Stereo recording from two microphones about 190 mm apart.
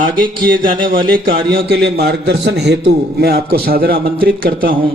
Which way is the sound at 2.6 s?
65° right (ahead or behind).